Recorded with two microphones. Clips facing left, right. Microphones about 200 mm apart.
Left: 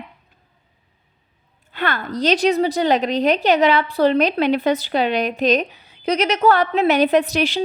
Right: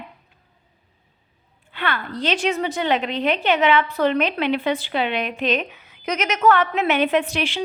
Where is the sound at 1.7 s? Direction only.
40° left (ahead or behind).